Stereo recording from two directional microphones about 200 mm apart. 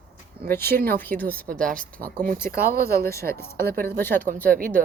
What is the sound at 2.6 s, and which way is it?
Speech, 50° right (ahead or behind).